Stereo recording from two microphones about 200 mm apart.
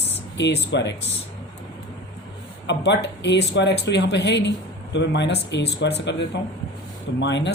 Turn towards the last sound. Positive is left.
turn(degrees=60)  # may be behind; listen again after turning